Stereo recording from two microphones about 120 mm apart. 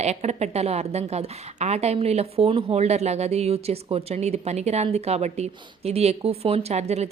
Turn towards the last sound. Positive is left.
turn(degrees=-65)  # may be behind; listen again after turning